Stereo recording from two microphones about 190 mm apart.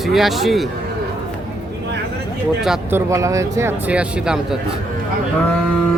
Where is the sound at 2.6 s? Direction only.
5° right (ahead or behind).